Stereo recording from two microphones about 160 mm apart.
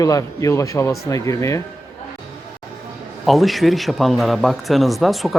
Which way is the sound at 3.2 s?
Centre (ahead or behind).